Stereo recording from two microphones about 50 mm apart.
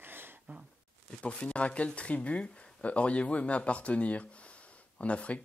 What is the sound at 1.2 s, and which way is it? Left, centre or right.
Speech, left.